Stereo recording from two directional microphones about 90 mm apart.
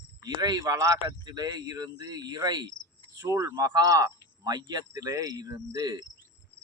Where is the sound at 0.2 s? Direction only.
45° right (ahead or behind).